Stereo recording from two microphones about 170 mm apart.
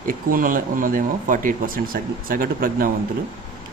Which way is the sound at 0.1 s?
55° right (ahead or behind).